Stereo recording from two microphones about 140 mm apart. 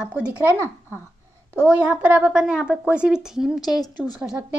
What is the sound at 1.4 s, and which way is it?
A woman's voice, 10° right (ahead or behind).